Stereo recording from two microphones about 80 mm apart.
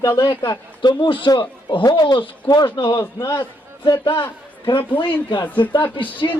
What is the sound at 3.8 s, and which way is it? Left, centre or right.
Speech, left.